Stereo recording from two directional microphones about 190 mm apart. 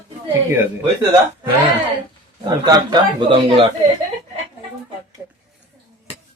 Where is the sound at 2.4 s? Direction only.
20° right (ahead or behind).